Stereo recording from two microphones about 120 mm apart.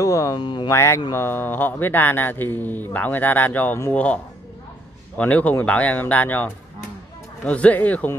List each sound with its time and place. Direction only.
0.0 s speech: 30° left (ahead or behind)
0.4 s speech: 45° left (ahead or behind)
0.7 s speech: 25° left (ahead or behind)